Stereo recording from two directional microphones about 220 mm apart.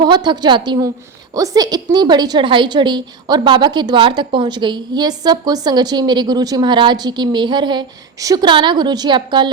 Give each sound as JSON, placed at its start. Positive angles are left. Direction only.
{"t": 0.0, "sound": "a woman's voice", "side_deg": -20}